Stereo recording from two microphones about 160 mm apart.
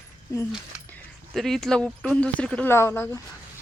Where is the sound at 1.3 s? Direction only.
Centre (ahead or behind).